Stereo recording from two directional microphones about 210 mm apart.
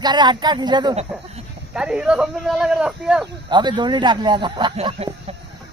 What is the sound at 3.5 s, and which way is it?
Speech, 20° right (ahead or behind).